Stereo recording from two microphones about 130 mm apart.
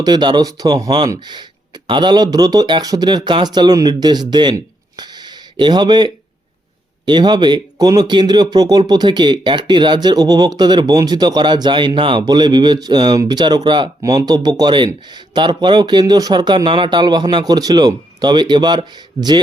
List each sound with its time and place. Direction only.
0.0 s speech: 35° right (ahead or behind)